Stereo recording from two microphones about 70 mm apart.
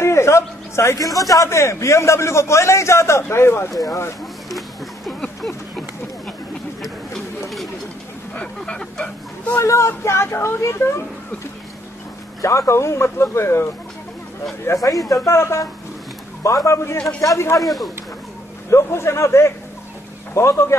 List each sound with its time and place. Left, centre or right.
0.0 s a man's voice: left
3.7 s speech: left
4.5 s a sound: centre
8.4 s a sound: centre
9.6 s speech: left
12.4 s a man's voice: left
14.7 s a man's voice: left
17.6 s speech: centre
18.7 s speech: left